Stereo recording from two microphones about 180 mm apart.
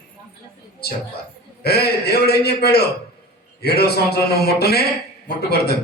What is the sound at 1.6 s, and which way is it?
A man's voice, 60° left (ahead or behind).